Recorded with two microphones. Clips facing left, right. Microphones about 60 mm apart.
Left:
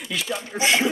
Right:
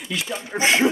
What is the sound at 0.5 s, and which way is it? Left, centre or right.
Speech, right.